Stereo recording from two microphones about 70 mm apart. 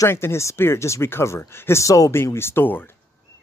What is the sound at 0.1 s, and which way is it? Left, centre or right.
Speech, left.